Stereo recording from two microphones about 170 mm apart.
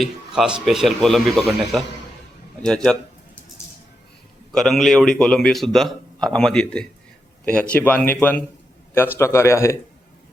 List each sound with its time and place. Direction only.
0.0 s a man's voice: 5° right (ahead or behind)
4.5 s a man's voice: centre (ahead or behind)